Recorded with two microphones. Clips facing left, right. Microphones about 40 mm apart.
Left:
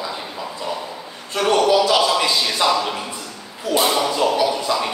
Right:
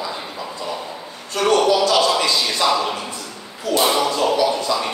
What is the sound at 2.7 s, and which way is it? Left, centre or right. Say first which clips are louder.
Speech: even; centre.